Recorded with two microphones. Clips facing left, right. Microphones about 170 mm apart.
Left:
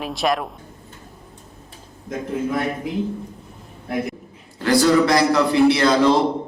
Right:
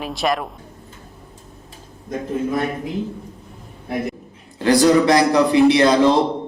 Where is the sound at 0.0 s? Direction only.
Centre (ahead or behind).